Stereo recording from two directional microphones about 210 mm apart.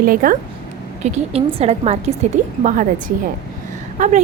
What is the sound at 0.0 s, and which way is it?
Speech, 45° right (ahead or behind).